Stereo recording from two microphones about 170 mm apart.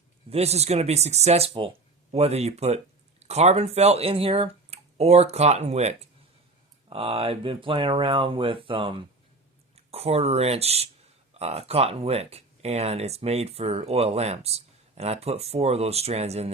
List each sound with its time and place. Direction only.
0.3 s speech: 40° right (ahead or behind)